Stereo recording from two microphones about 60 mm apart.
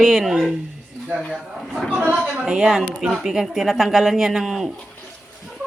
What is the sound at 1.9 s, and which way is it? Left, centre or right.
Speech, right.